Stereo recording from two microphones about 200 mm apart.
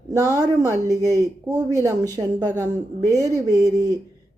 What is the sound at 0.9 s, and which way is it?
Speech, 15° left (ahead or behind).